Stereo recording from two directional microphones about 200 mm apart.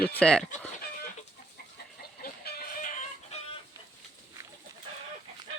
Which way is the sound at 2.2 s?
50° left (ahead or behind).